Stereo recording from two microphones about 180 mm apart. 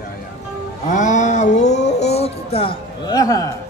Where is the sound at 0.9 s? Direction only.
45° left (ahead or behind); by 3.5 s 20° left (ahead or behind).